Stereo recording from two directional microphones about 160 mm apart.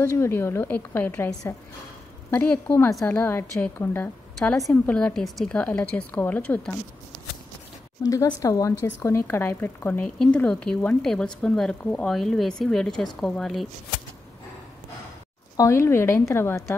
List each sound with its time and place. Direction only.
0.0 s a woman's voice: 15° left (ahead or behind)
4.4 s a woman's voice: centre (ahead or behind)
8.0 s speech: 20° left (ahead or behind); by 13.7 s centre (ahead or behind)
15.5 s a woman's voice: 20° left (ahead or behind)